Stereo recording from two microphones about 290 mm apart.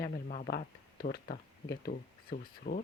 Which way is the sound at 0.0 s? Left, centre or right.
Left.